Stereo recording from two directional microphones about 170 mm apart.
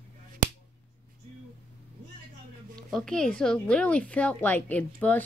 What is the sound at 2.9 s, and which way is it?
A woman's voice, 5° left (ahead or behind).